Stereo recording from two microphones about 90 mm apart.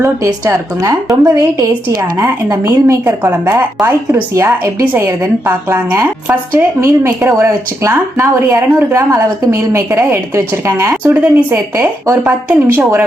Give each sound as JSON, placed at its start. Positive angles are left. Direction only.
{"t": 0.3, "sound": "speech", "side_deg": -40}
{"t": 3.1, "sound": "speech", "side_deg": -20}
{"t": 11.1, "sound": "speech", "side_deg": -15}
{"t": 11.5, "sound": "speech", "side_deg": -30}
{"t": 12.2, "sound": "speech", "side_deg": -20}